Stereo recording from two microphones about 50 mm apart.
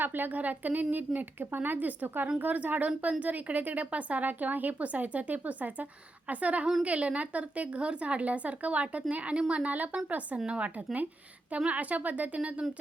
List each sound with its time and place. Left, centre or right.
0.0 s a woman's voice: right